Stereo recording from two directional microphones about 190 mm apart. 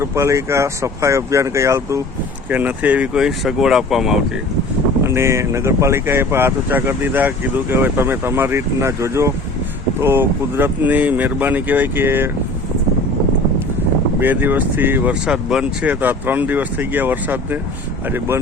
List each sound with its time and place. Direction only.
0.0 s speech: 15° right (ahead or behind)
5.0 s speech: 15° right (ahead or behind)
14.2 s speech: 10° right (ahead or behind)